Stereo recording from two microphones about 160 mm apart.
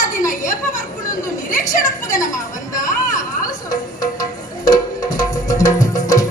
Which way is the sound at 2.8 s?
55° left (ahead or behind).